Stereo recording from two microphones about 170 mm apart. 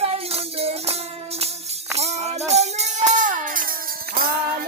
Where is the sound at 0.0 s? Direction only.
35° right (ahead or behind).